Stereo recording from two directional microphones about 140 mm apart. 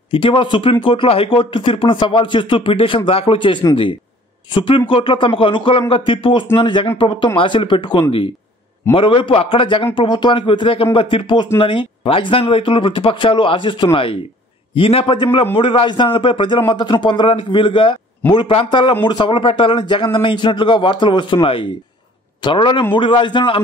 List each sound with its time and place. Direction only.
0.1 s a man's voice: 40° left (ahead or behind)
4.6 s a man's voice: 40° left (ahead or behind)